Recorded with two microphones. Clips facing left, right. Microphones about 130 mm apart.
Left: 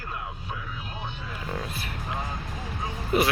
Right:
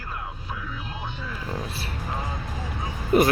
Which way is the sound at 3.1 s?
45° right (ahead or behind).